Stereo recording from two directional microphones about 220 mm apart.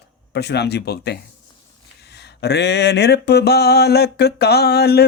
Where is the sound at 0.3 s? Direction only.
50° left (ahead or behind).